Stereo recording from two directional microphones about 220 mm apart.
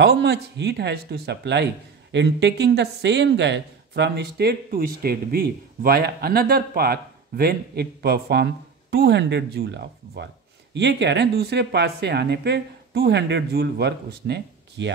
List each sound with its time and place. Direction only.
0.0 s speech: 50° right (ahead or behind)